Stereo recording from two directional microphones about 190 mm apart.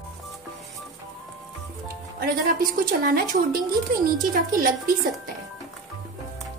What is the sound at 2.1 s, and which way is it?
A woman's voice, 50° right (ahead or behind).